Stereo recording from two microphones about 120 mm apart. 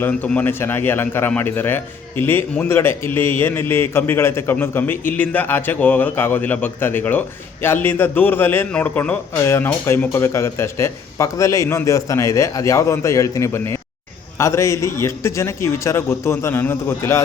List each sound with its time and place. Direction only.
0.0 s a man's voice: 15° left (ahead or behind)